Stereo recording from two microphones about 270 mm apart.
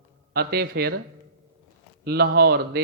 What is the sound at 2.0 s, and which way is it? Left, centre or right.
Speech, right.